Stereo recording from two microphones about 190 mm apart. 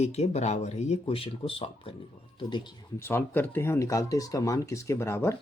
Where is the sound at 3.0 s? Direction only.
15° left (ahead or behind).